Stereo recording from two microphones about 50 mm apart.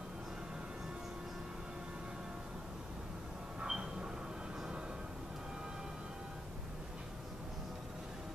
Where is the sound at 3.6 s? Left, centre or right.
Centre.